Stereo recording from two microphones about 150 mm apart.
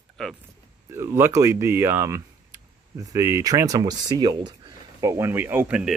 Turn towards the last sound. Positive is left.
turn(degrees=-5)  # may be behind; listen again after turning